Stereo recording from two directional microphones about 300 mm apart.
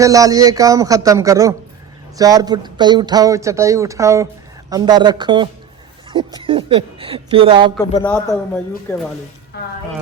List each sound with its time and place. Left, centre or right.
0.0 s speech: centre
7.8 s a man's voice: centre